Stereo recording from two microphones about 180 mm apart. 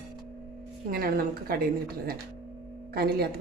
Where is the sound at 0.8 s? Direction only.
55° right (ahead or behind).